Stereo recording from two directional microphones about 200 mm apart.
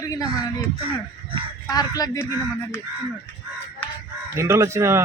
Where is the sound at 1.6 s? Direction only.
20° left (ahead or behind).